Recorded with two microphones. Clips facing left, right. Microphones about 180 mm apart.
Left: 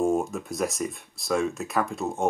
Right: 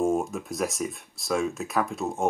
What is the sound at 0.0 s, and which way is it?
Speech, centre (ahead or behind).